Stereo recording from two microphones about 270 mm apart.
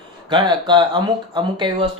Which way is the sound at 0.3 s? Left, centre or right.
Centre.